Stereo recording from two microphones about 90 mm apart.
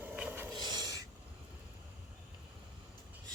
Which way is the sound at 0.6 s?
50° right (ahead or behind).